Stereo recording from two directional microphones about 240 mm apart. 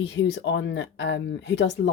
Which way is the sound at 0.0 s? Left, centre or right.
Left.